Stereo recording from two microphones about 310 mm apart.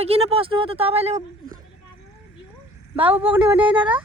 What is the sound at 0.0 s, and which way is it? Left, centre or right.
Speech, centre.